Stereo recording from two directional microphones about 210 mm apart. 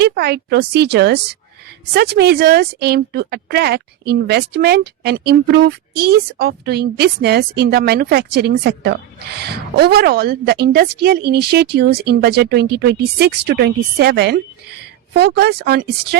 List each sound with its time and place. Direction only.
0.0 s a woman's voice: 50° right (ahead or behind)